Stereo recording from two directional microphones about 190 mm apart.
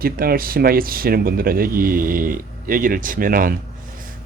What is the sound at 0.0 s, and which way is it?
Speech, 50° right (ahead or behind).